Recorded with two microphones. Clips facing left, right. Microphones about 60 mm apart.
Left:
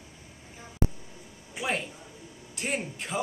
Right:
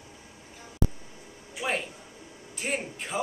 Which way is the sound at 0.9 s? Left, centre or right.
Right.